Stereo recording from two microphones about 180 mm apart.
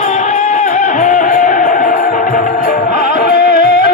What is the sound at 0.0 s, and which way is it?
Music, 40° left (ahead or behind).